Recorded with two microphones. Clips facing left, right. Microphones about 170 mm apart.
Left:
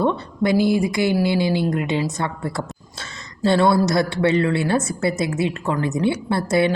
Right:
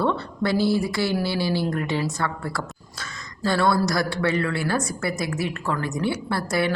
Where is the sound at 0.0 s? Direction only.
15° left (ahead or behind).